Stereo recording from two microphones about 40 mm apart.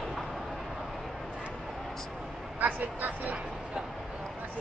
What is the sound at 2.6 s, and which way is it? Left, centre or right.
Speech, right.